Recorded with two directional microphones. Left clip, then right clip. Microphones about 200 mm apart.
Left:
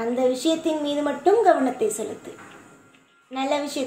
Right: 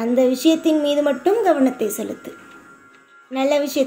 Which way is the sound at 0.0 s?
55° right (ahead or behind).